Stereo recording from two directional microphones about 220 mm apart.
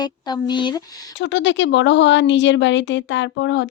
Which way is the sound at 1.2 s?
55° left (ahead or behind).